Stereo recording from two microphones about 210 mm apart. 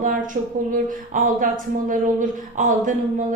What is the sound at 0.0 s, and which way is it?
Speech, 40° right (ahead or behind).